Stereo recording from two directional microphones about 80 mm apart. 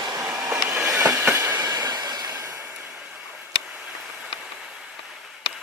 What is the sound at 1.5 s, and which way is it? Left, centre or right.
Train, right.